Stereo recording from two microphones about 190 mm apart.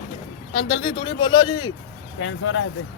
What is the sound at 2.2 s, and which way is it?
Speech, 90° left.